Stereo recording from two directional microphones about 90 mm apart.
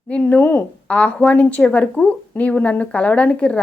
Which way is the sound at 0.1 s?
15° left (ahead or behind).